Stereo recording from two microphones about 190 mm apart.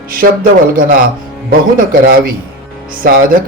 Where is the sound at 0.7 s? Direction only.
50° right (ahead or behind).